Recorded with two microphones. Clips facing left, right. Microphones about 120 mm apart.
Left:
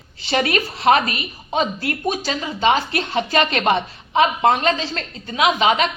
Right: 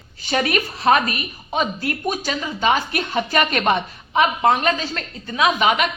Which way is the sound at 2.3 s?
35° left (ahead or behind).